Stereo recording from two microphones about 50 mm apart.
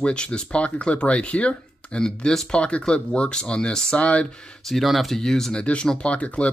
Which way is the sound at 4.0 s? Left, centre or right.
Left.